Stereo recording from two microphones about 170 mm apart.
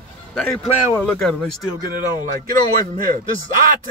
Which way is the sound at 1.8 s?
55° right (ahead or behind).